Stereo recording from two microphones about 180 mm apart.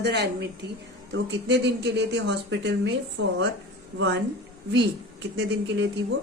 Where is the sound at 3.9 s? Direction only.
75° right (ahead or behind).